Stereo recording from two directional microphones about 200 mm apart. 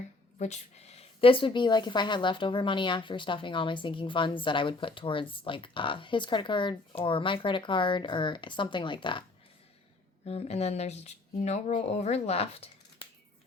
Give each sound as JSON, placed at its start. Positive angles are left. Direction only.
{"t": 0.3, "sound": "speech", "side_deg": 35}
{"t": 10.2, "sound": "speech", "side_deg": 30}